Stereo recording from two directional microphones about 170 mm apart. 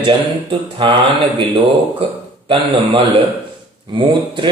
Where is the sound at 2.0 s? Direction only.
30° right (ahead or behind).